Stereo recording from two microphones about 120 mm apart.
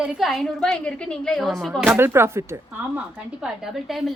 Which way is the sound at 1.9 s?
20° right (ahead or behind).